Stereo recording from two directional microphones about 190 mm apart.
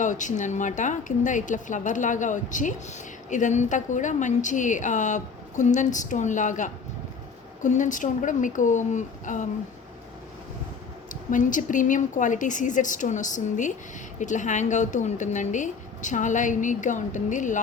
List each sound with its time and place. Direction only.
0.0 s a woman's voice: 40° left (ahead or behind)
11.1 s a woman's voice: 45° left (ahead or behind)